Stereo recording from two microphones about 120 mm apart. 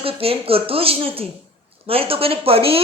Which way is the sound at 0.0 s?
50° right (ahead or behind).